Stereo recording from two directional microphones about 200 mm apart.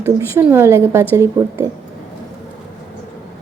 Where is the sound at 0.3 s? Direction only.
10° right (ahead or behind).